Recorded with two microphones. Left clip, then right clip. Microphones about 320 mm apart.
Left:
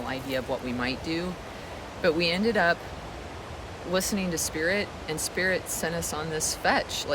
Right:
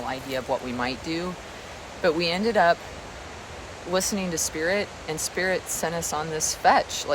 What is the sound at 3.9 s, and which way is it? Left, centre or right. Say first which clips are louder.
Speech: right 2 dB; centre.